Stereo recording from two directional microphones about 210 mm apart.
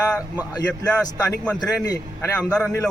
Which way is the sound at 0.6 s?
5° left (ahead or behind).